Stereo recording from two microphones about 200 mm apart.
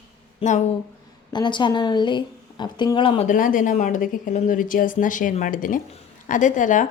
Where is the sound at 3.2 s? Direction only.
40° left (ahead or behind).